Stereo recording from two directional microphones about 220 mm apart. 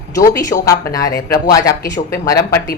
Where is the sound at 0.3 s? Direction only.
15° left (ahead or behind).